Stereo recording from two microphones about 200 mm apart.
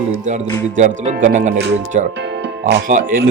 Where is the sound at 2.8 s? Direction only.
45° right (ahead or behind).